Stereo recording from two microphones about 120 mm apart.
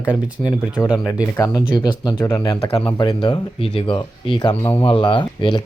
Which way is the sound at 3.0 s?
35° left (ahead or behind).